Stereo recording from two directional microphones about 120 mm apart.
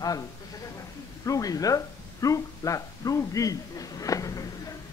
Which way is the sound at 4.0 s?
30° left (ahead or behind).